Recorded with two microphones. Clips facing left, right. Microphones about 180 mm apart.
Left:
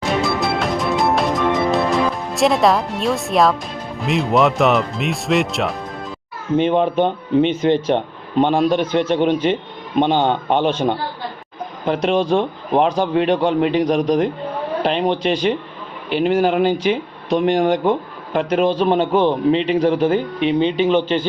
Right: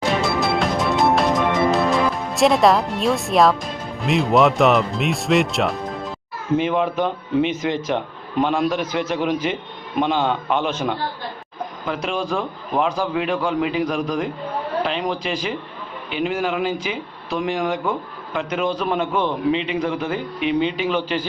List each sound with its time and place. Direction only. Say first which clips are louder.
0.2 s music: left 1 dB; centre (ahead or behind)
2.3 s speech: even; centre (ahead or behind)
6.6 s a man's voice: left 6 dB; 30° left (ahead or behind)